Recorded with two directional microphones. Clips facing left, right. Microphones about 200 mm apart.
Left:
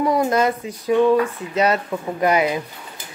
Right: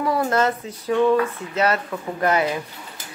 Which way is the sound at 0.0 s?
15° left (ahead or behind).